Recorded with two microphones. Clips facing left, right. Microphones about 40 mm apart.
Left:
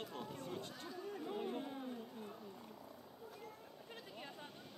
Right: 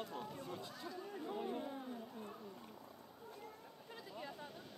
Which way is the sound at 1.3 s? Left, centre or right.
Centre.